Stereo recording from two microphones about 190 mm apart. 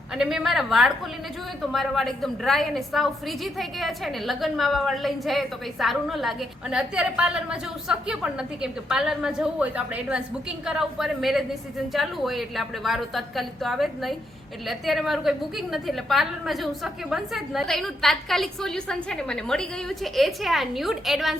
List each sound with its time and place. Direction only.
0.1 s a woman's voice: 5° right (ahead or behind)